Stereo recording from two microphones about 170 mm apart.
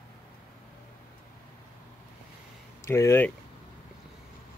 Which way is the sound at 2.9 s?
15° left (ahead or behind).